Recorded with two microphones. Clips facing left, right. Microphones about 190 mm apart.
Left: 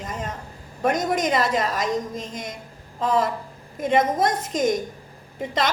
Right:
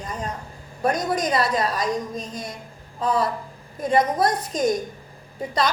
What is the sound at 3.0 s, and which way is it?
Speech, 90° left.